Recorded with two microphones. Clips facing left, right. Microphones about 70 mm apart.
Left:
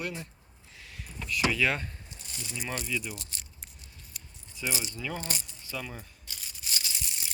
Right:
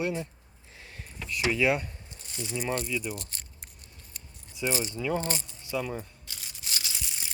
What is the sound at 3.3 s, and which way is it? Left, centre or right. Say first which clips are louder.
Keys jangling: even; right.